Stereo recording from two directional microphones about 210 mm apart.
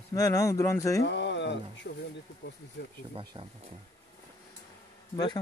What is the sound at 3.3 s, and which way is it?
Speech, 25° right (ahead or behind).